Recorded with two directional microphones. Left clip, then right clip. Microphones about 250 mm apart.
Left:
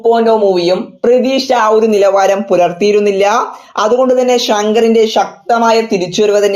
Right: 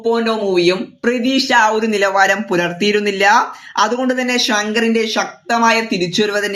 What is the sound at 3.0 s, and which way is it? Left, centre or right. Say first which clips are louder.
Speech: right 1 dB; left.